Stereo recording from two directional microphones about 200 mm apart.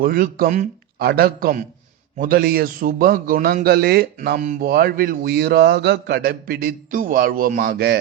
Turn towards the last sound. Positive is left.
turn(degrees=-55)  # may be behind; listen again after turning